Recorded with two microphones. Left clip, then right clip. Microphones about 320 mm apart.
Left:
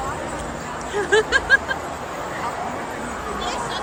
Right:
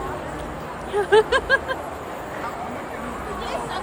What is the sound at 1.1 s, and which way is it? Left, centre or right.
Speech, centre.